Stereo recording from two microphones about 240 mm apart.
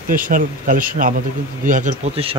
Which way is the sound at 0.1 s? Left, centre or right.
Right.